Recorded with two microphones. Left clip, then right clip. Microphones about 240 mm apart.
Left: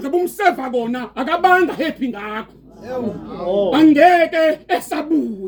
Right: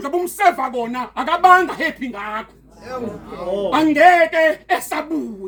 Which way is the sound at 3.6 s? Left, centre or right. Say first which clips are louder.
Left 1 dB; centre.